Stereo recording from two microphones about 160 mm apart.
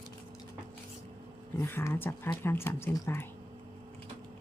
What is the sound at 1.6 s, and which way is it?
A woman's voice, 15° left (ahead or behind).